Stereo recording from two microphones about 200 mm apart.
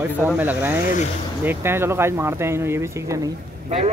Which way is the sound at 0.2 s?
10° right (ahead or behind).